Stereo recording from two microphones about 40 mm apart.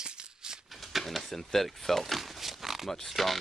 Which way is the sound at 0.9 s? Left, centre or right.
Centre.